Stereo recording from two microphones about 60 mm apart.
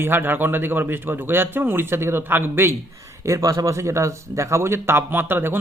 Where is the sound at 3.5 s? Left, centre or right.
Right.